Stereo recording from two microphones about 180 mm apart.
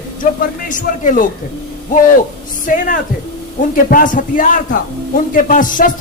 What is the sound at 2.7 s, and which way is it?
A man's voice, 45° left (ahead or behind).